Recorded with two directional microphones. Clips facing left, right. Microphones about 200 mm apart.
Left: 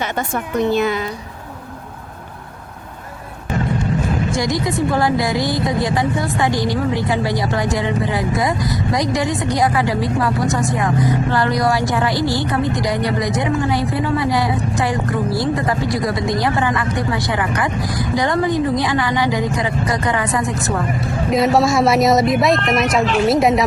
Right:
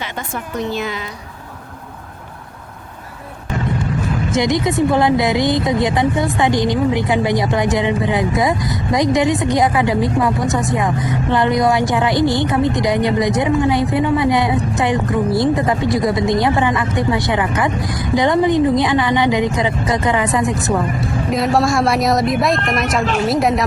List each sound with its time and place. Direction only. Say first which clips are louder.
0.0 s a woman's voice: left 4 dB; 50° left (ahead or behind)
4.4 s a woman's voice: right 6 dB; 20° right (ahead or behind)
21.0 s a woman's voice: left 2 dB; centre (ahead or behind)